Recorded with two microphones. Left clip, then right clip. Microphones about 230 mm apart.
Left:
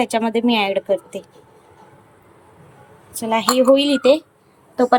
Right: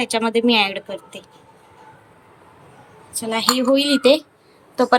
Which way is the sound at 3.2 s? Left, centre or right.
Centre.